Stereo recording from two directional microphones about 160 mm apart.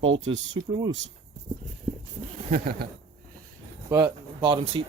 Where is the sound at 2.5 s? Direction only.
70° right (ahead or behind).